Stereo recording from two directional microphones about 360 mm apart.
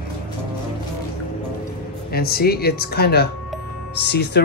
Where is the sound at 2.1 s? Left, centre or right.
Left.